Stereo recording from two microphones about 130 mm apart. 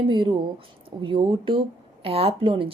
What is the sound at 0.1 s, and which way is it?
A woman's voice, 40° right (ahead or behind).